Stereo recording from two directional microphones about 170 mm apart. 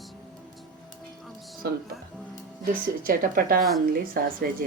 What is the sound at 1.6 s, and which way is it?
Speech, 65° right (ahead or behind).